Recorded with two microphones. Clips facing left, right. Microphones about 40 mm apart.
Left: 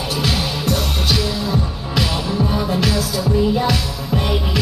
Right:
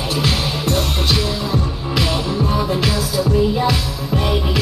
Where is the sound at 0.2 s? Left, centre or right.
Centre.